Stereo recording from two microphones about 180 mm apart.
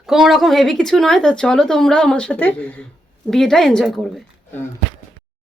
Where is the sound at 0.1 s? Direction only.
Centre (ahead or behind).